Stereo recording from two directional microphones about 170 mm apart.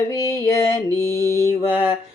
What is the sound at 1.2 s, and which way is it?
Mantra, 15° left (ahead or behind).